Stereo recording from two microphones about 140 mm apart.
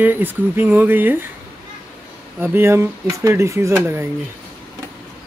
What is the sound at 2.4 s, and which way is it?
Speech, 15° right (ahead or behind).